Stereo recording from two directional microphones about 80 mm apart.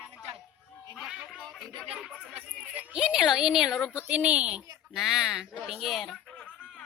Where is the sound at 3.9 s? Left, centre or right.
Centre.